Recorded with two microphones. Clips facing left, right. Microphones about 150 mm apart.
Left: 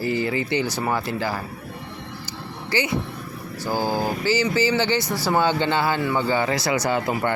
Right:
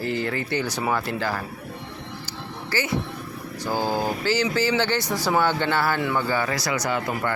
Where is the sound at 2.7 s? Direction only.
20° left (ahead or behind).